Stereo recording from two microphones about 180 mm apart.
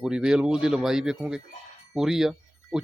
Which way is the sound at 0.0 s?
5° right (ahead or behind).